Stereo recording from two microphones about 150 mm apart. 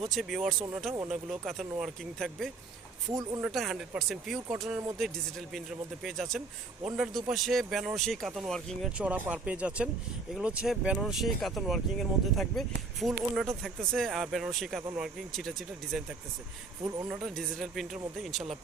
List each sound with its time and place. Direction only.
0.0 s speech: centre (ahead or behind)
3.1 s speech: 20° right (ahead or behind)
3.4 s speech: centre (ahead or behind)
17.1 s speech: centre (ahead or behind)